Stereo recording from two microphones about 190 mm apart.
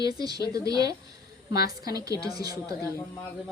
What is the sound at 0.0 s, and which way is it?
A woman's voice, 20° right (ahead or behind).